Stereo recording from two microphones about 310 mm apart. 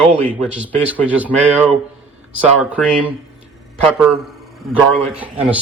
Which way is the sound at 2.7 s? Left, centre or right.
Centre.